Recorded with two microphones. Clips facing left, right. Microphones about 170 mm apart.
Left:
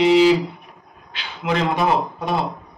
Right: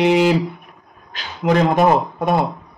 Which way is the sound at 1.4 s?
45° right (ahead or behind).